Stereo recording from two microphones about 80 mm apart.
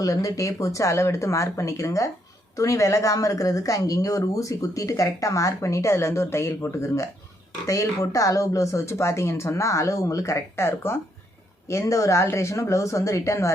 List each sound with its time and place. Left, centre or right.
0.0 s speech: left